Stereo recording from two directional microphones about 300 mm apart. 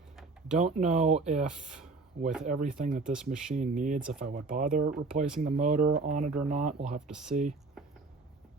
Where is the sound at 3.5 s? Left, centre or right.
Right.